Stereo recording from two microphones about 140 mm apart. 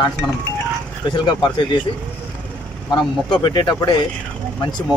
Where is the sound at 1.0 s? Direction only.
30° left (ahead or behind).